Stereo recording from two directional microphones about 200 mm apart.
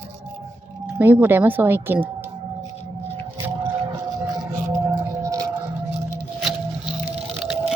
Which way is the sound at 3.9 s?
20° right (ahead or behind).